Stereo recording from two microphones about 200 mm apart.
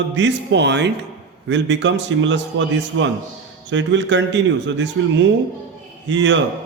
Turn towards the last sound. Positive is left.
turn(degrees=-65)  # may be behind; listen again after turning